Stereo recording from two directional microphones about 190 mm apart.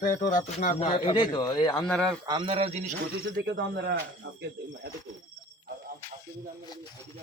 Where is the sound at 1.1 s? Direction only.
25° left (ahead or behind).